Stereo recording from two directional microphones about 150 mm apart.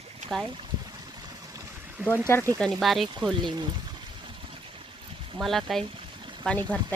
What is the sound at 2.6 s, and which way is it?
Speech, centre (ahead or behind).